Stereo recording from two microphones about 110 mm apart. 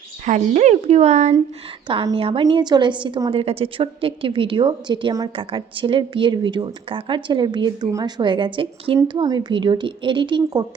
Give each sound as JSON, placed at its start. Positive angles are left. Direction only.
{"t": 0.3, "sound": "speech", "side_deg": -90}
{"t": 2.1, "sound": "a woman's voice", "side_deg": -55}
{"t": 2.4, "sound": "speech", "side_deg": -40}
{"t": 3.2, "sound": "speech", "side_deg": -60}
{"t": 7.9, "sound": "a woman's voice", "side_deg": -30}
{"t": 8.2, "sound": "speech", "side_deg": -45}